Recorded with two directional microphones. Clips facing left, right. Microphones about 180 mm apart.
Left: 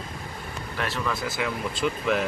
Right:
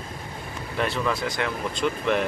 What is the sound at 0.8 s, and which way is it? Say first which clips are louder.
Speech: right 4 dB; centre (ahead or behind).